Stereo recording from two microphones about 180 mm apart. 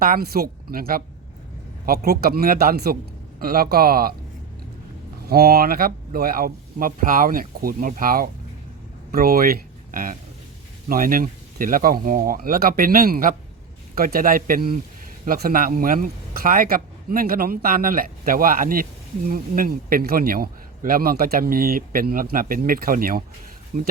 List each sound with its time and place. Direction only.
0.0 s speech: 55° right (ahead or behind)
2.0 s speech: 55° right (ahead or behind)
5.2 s a man's voice: 60° right (ahead or behind)